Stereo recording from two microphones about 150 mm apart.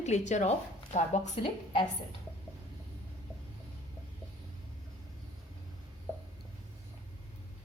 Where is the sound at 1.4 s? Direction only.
40° left (ahead or behind).